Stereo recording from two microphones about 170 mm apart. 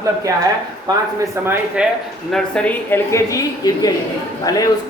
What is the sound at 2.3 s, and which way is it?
A man's voice, 5° left (ahead or behind).